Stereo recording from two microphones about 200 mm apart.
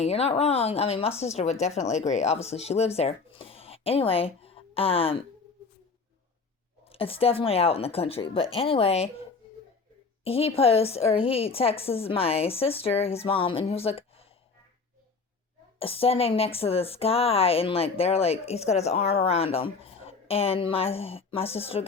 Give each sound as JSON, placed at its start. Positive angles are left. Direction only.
{"t": 0.0, "sound": "speech", "side_deg": 30}
{"t": 6.8, "sound": "a woman's voice", "side_deg": 30}
{"t": 10.2, "sound": "a woman's voice", "side_deg": 30}
{"t": 15.8, "sound": "a woman's voice", "side_deg": 30}